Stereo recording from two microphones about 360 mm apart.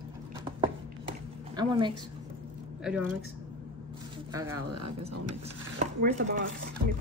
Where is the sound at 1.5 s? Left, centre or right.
Centre.